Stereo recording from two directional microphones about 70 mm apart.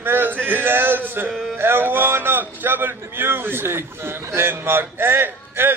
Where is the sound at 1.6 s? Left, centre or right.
Right.